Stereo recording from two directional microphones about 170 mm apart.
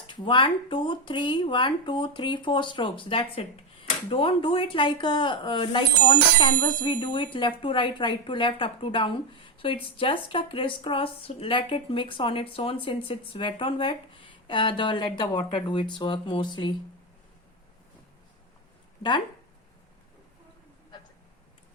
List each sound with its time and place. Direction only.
0.1 s speech: 30° left (ahead or behind)